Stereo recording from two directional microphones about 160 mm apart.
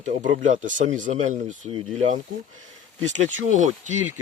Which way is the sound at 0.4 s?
55° right (ahead or behind).